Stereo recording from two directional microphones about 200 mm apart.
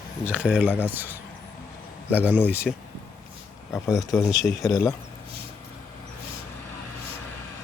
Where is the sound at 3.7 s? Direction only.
15° left (ahead or behind).